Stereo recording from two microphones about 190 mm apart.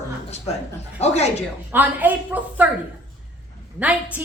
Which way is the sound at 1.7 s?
10° right (ahead or behind).